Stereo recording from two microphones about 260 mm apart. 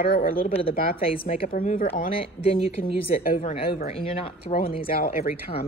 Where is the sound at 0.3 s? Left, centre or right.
Left.